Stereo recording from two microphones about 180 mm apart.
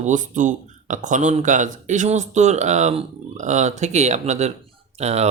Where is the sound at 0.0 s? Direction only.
45° right (ahead or behind).